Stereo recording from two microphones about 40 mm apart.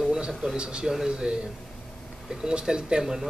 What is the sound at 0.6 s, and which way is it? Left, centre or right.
Speech, right.